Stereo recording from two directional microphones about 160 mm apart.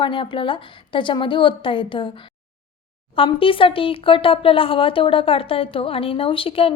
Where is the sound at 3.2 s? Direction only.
35° left (ahead or behind).